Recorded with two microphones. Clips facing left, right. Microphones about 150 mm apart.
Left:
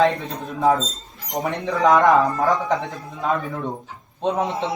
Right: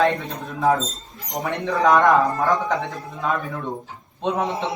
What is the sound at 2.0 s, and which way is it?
Speech, centre (ahead or behind).